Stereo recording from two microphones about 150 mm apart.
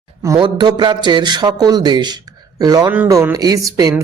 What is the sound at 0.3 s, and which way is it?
Speech, 30° right (ahead or behind).